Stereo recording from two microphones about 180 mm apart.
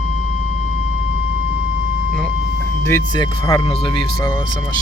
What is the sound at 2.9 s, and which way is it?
Speech, 20° left (ahead or behind).